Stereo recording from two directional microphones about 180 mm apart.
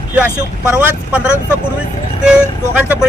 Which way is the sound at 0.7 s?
5° right (ahead or behind).